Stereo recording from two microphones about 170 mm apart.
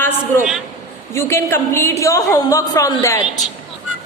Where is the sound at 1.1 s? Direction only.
15° left (ahead or behind).